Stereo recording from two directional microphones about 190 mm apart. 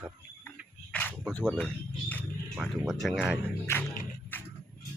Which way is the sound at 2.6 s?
Centre (ahead or behind).